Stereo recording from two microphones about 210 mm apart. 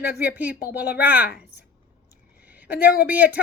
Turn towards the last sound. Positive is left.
turn(degrees=-10)  # may be behind; listen again after turning